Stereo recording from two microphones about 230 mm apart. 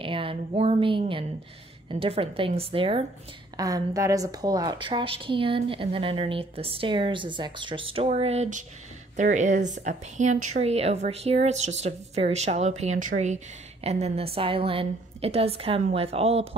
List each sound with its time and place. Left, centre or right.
0.0 s a woman's voice: right